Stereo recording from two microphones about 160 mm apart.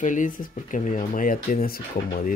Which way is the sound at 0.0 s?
55° left (ahead or behind).